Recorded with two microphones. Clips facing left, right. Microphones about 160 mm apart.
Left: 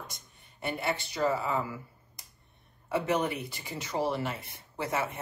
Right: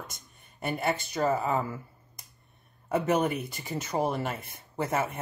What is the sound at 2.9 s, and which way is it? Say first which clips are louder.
A woman's voice: right 3 dB; 45° right (ahead or behind).